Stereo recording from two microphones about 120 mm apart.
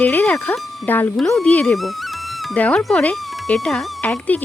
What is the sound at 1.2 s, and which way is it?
Speech, centre (ahead or behind).